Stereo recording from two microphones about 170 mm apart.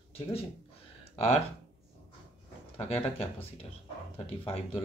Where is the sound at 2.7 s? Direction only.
35° left (ahead or behind).